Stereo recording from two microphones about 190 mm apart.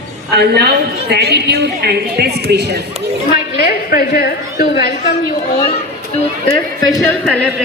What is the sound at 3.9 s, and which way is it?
A woman's voice, 55° left (ahead or behind).